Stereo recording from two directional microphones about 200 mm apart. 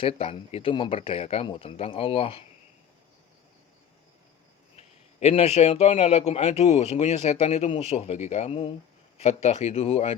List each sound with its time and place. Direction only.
0.0 s speech: 30° left (ahead or behind)
4.8 s a man's voice: 30° left (ahead or behind)